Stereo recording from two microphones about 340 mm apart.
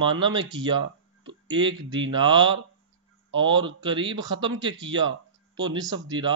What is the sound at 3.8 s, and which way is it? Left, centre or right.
Speech, centre.